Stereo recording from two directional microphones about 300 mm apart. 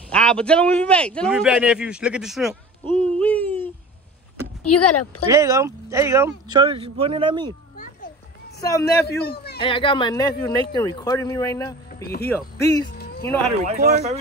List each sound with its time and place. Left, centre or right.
0.1 s speech: centre
3.0 s a sound: centre
4.6 s speech: left
5.2 s speech: centre
7.7 s children playing: left
8.5 s a man's voice: centre
8.8 s a man's voice: left
9.6 s speech: centre
13.7 s a man's voice: right